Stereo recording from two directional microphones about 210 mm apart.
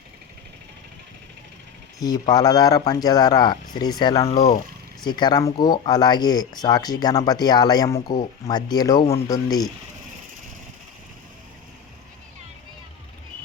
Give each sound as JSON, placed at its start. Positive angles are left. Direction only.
{"t": 2.0, "sound": "speech", "side_deg": 15}
{"t": 4.2, "sound": "speech", "side_deg": 30}